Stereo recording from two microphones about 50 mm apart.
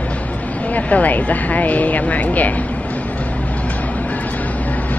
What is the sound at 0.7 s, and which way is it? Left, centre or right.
Speech, left.